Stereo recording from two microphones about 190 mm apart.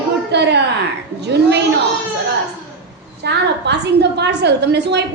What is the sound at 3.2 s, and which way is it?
A woman's voice, 60° right (ahead or behind).